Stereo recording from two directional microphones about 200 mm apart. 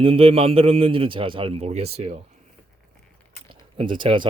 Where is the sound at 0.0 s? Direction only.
30° right (ahead or behind).